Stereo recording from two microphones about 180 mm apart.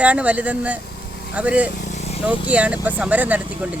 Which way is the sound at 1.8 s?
40° left (ahead or behind).